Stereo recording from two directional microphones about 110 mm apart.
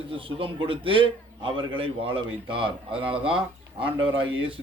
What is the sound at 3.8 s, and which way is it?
Speech, 50° right (ahead or behind).